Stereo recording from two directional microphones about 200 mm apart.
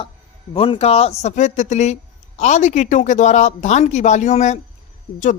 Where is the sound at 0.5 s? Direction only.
30° left (ahead or behind).